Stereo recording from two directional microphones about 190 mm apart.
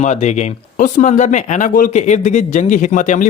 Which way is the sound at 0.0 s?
35° left (ahead or behind).